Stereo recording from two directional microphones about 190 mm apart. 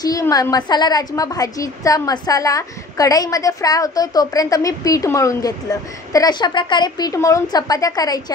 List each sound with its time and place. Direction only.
0.0 s a woman's voice: 20° left (ahead or behind)